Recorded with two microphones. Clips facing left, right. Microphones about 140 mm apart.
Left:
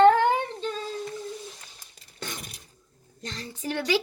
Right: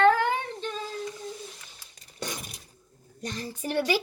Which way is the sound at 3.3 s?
10° right (ahead or behind).